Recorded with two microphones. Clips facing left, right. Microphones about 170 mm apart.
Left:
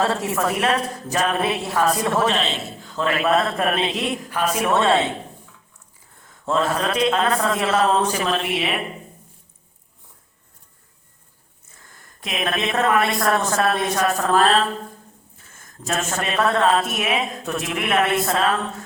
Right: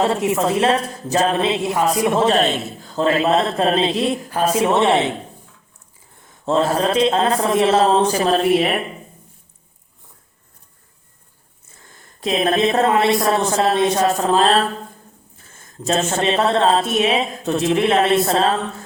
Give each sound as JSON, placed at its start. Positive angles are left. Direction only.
{"t": 0.0, "sound": "speech", "side_deg": -20}
{"t": 2.4, "sound": "a man's voice", "side_deg": -50}
{"t": 2.9, "sound": "speech", "side_deg": -30}
{"t": 6.2, "sound": "speech", "side_deg": -25}
{"t": 11.9, "sound": "speech", "side_deg": -30}
{"t": 15.5, "sound": "speech", "side_deg": -25}